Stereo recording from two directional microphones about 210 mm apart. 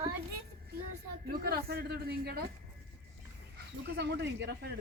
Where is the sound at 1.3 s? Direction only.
45° right (ahead or behind).